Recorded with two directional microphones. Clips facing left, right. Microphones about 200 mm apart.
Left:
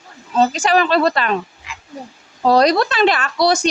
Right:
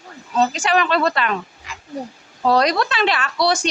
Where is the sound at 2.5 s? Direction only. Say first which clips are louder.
Left 4 dB; 35° left (ahead or behind).